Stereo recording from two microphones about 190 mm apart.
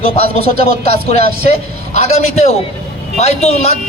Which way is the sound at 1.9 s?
35° left (ahead or behind).